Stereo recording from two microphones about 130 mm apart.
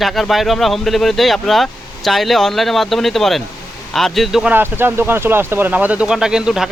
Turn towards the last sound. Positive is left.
turn(degrees=-5)  # may be behind; listen again after turning